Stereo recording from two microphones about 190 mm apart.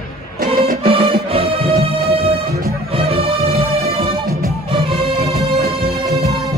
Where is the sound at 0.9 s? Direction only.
30° right (ahead or behind).